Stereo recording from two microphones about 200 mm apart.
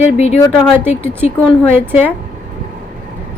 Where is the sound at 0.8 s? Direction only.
10° right (ahead or behind).